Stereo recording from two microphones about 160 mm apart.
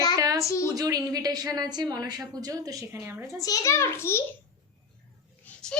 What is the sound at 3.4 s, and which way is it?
Speech, 20° left (ahead or behind).